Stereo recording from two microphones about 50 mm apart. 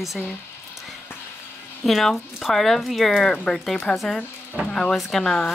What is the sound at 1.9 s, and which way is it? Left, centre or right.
Speech, centre.